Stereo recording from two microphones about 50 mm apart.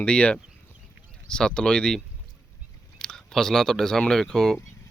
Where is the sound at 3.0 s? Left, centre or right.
Centre.